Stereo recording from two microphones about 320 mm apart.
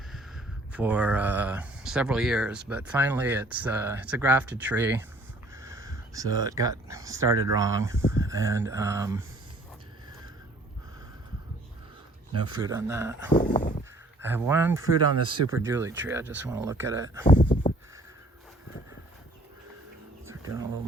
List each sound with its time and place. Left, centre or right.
0.1 s speech: centre
12.3 s speech: centre
13.3 s a sound: left
14.3 s speech: centre
17.2 s a sound: left
20.4 s insect: centre